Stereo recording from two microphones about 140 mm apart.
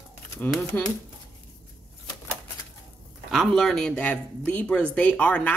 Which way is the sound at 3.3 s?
Centre (ahead or behind).